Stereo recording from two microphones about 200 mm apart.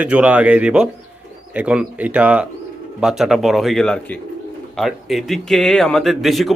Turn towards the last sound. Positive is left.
turn(degrees=0)  # may be behind; listen again after turning